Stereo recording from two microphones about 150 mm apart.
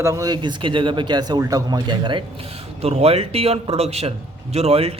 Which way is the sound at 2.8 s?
45° right (ahead or behind).